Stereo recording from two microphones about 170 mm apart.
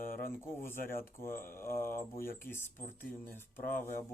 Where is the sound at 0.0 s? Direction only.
55° left (ahead or behind).